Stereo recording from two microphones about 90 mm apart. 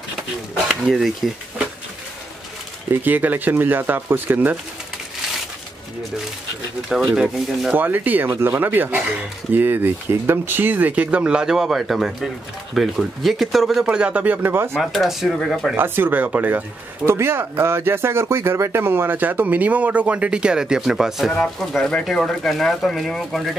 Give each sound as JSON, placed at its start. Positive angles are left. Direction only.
{"t": 0.7, "sound": "speech", "side_deg": -5}
{"t": 2.9, "sound": "speech", "side_deg": -20}
{"t": 7.2, "sound": "speech", "side_deg": -5}
{"t": 7.7, "sound": "speech", "side_deg": -20}
{"t": 14.8, "sound": "speech", "side_deg": 0}
{"t": 15.7, "sound": "speech", "side_deg": -25}